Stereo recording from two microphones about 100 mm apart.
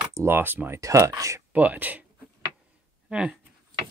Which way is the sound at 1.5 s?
15° right (ahead or behind).